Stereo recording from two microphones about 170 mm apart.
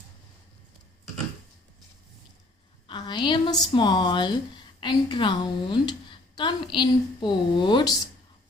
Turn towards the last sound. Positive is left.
turn(degrees=25)  # may be behind; listen again after turning